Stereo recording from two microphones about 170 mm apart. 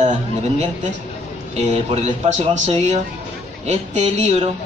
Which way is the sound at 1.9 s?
40° right (ahead or behind).